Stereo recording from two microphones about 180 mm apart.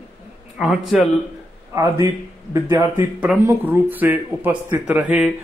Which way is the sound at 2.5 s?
15° right (ahead or behind).